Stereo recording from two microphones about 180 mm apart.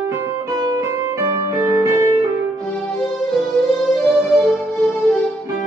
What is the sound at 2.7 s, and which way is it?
Music, centre (ahead or behind).